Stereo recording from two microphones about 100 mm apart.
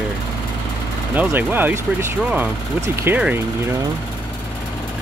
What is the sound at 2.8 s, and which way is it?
Speech, 25° right (ahead or behind).